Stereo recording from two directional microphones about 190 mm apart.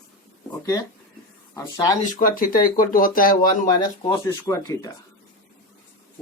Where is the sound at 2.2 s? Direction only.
45° left (ahead or behind).